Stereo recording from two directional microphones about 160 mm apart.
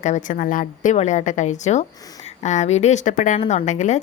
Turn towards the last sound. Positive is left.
turn(degrees=45)  # may be behind; listen again after turning